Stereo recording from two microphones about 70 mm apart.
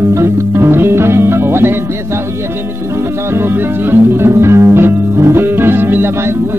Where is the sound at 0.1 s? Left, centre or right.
Right.